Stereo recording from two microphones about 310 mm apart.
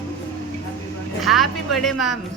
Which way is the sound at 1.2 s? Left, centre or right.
Centre.